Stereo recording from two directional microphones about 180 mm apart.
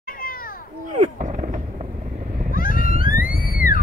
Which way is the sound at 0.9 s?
45° right (ahead or behind).